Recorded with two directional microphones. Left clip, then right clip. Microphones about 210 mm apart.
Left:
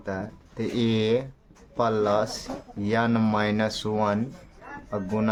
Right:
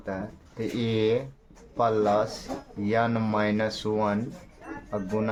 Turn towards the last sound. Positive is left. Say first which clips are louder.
# left 1 dB
turn(degrees=35)  # may be behind; listen again after turning